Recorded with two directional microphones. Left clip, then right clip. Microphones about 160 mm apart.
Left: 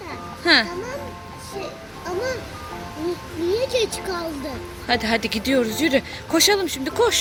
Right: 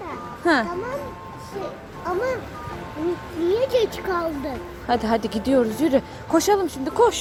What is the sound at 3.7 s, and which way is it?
Speech, 20° right (ahead or behind).